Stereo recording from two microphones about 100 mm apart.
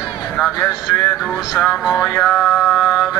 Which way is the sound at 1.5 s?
Centre (ahead or behind).